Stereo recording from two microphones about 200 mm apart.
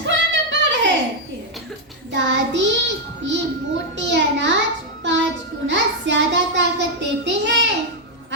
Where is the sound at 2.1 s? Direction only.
65° right (ahead or behind).